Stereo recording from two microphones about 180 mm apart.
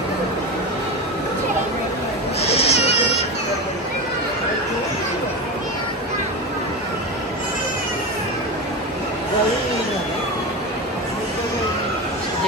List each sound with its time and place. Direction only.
2.4 s cat: 35° left (ahead or behind)